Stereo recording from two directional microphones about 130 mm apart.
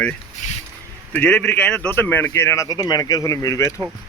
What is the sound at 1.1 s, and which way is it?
Speech, 10° left (ahead or behind).